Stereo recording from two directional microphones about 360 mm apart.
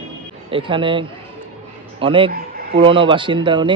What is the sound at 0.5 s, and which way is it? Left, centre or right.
A man's voice, centre.